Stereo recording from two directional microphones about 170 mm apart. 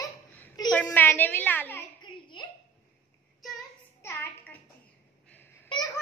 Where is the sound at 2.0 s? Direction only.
25° left (ahead or behind).